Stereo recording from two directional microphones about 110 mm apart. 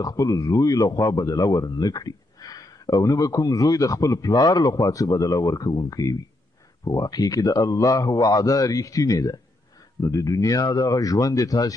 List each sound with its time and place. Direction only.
0.0 s speech: 30° left (ahead or behind)